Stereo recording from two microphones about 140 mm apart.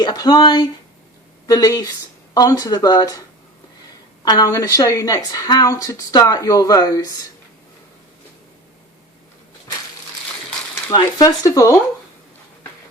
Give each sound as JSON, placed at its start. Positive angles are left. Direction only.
{"t": 0.0, "sound": "a woman's voice", "side_deg": 30}
{"t": 4.2, "sound": "a woman's voice", "side_deg": 30}
{"t": 10.9, "sound": "a woman's voice", "side_deg": 25}